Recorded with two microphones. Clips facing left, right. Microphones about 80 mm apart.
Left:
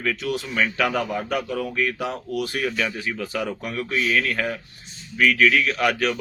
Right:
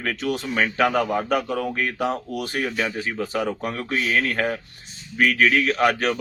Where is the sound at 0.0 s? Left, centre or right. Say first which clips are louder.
Even; right.